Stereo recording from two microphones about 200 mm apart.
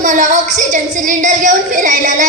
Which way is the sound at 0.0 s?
40° right (ahead or behind).